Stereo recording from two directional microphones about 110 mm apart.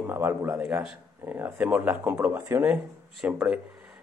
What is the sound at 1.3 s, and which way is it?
A man's voice, 20° right (ahead or behind).